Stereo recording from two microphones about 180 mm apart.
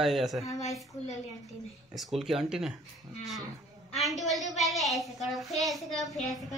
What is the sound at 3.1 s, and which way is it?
Speech, 20° right (ahead or behind).